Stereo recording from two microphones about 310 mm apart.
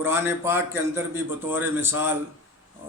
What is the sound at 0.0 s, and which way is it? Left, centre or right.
A man's voice, centre.